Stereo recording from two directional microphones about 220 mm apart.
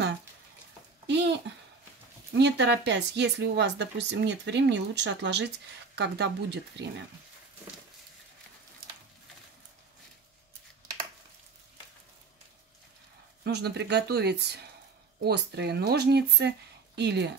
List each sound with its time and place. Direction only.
1.0 s a sound: 50° right (ahead or behind)
2.3 s speech: 50° right (ahead or behind)
13.4 s speech: 50° right (ahead or behind)